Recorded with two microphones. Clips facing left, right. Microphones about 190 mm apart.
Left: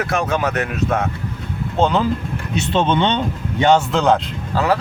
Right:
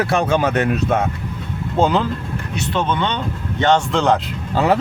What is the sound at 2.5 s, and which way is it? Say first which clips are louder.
Speech: left 4 dB; 20° left (ahead or behind).